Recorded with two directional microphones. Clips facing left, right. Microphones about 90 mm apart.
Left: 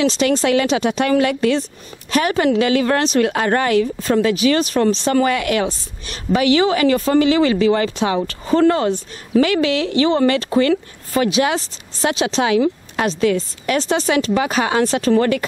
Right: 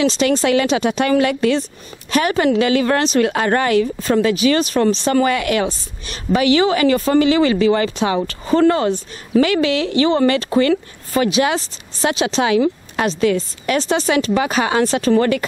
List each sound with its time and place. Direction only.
0.0 s a woman's voice: 10° right (ahead or behind)